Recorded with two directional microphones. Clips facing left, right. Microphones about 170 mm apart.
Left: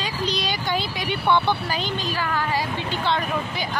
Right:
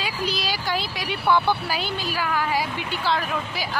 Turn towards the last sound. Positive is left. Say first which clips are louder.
# left 1 dB
turn(degrees=-5)  # may be behind; listen again after turning